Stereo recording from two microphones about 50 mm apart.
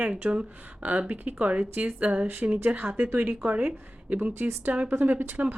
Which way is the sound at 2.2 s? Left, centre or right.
Right.